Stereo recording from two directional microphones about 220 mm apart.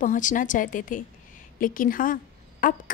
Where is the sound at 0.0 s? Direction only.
35° left (ahead or behind).